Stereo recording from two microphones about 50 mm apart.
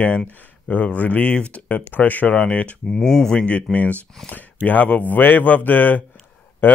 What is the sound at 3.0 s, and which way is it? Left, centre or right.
Speech, centre.